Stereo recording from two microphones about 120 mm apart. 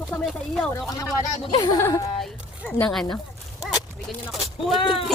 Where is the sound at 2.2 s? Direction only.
10° left (ahead or behind).